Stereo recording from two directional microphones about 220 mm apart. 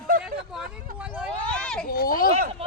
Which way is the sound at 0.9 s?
5° right (ahead or behind).